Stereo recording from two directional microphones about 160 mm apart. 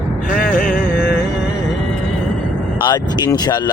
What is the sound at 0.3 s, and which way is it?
Music, 60° left (ahead or behind).